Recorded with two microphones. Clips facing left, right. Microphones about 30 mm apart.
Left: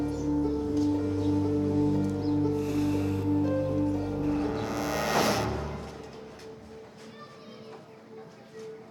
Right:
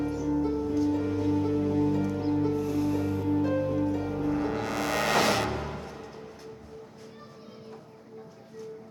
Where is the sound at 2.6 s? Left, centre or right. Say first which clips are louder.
Even; centre.